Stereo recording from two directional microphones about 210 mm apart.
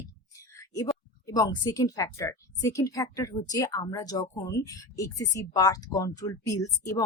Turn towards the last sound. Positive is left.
turn(degrees=15)  # may be behind; listen again after turning